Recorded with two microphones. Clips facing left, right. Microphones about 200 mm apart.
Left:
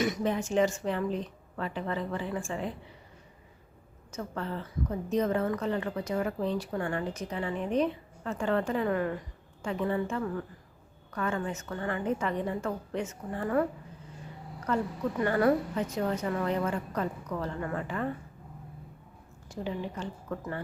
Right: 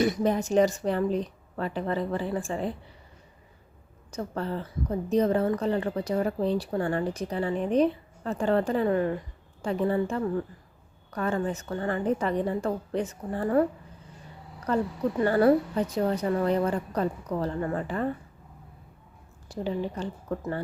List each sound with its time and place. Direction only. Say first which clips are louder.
0.0 s a woman's voice: right 4 dB; 35° right (ahead or behind)
4.1 s a woman's voice: right 4 dB; 35° right (ahead or behind)
15.2 s a woman's voice: right 4 dB; 30° right (ahead or behind)
19.5 s a woman's voice: right 5 dB; 35° right (ahead or behind)